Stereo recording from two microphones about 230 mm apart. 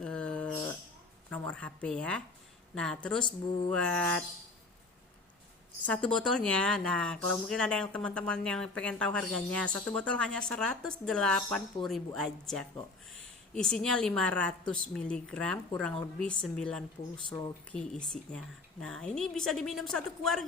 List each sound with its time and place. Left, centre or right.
0.0 s a sound: centre
1.3 s speech: centre
3.2 s speech: centre
3.7 s speech: centre
5.9 s speech: centre